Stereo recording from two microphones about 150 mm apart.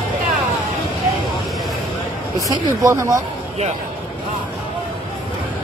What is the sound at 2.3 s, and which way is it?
Speech, 25° right (ahead or behind).